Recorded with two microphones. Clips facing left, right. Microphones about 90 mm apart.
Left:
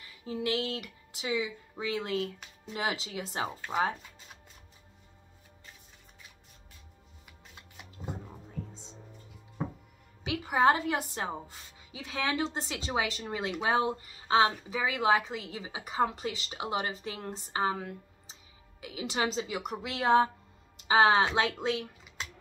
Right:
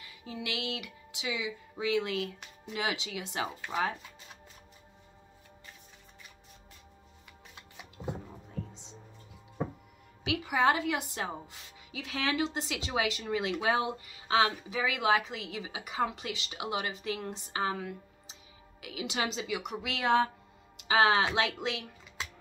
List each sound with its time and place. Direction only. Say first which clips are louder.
0.0 s a woman's voice: left 6 dB; 40° left (ahead or behind)
10.4 s a woman's voice: left 3 dB; 40° left (ahead or behind)